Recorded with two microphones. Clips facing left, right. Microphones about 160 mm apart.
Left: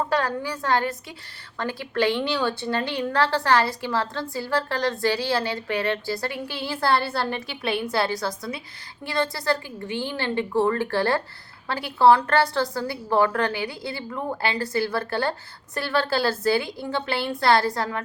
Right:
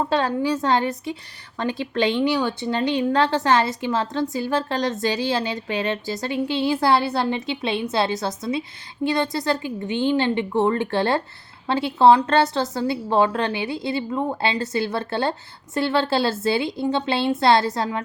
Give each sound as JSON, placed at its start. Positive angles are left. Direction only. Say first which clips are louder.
{"t": 0.1, "sound": "a woman's voice", "louder": "right 4 dB", "side_deg": -20}